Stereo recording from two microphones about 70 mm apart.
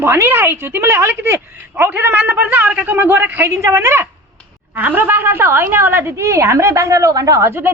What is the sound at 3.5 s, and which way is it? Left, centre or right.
Speech, right.